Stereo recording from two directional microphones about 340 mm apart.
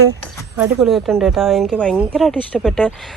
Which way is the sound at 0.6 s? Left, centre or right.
Centre.